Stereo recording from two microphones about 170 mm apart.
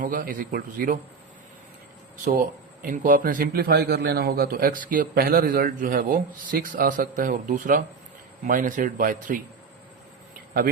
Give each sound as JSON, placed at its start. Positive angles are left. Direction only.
{"t": 0.0, "sound": "a man's voice", "side_deg": -55}
{"t": 2.8, "sound": "a man's voice", "side_deg": -50}